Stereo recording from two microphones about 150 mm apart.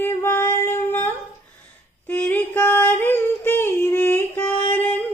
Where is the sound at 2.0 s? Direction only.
10° left (ahead or behind).